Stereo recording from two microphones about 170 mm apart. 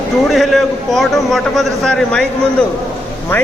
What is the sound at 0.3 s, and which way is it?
A man's voice, centre (ahead or behind).